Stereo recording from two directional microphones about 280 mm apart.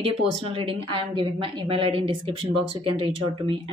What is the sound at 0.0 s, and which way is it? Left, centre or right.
A woman's voice, centre.